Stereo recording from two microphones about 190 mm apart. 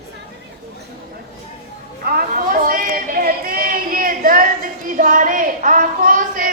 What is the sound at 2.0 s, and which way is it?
Speech, 50° right (ahead or behind).